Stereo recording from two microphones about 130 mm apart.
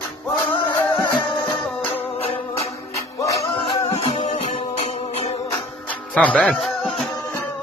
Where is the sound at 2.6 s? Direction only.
25° left (ahead or behind).